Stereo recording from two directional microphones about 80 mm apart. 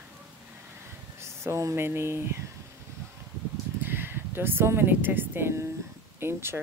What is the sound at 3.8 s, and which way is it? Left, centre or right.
Speech, right.